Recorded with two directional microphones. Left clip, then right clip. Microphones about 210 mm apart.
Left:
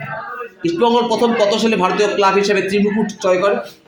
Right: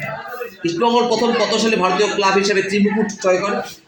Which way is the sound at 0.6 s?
30° left (ahead or behind).